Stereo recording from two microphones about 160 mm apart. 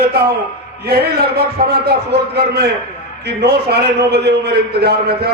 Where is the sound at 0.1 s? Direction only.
85° right.